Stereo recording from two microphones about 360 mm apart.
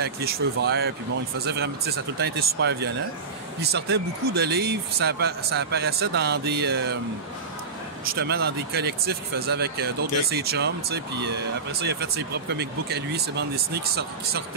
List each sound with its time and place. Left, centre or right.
0.0 s speech: right
8.1 s speech: right